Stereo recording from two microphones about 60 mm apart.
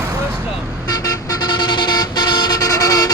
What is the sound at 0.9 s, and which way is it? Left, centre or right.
Vehicle, left.